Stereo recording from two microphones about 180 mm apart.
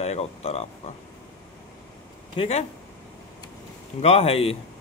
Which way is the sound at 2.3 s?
35° left (ahead or behind).